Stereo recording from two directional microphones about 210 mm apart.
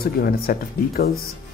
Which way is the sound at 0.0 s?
45° left (ahead or behind).